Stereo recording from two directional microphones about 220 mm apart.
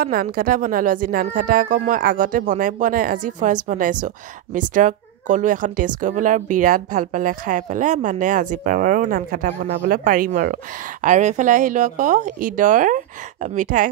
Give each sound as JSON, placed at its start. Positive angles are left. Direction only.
{"t": 0.0, "sound": "speech", "side_deg": -40}